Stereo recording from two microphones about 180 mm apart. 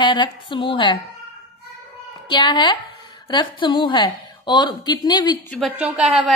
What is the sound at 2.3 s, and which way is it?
A woman's voice, 25° left (ahead or behind).